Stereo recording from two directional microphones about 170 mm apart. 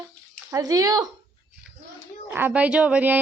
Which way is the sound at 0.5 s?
20° right (ahead or behind).